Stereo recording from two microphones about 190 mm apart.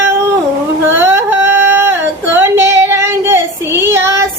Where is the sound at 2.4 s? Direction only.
15° right (ahead or behind).